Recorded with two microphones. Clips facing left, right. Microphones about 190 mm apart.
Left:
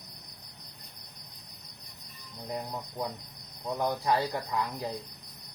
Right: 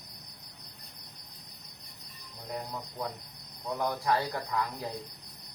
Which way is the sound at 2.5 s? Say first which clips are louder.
Left 2 dB; 25° left (ahead or behind).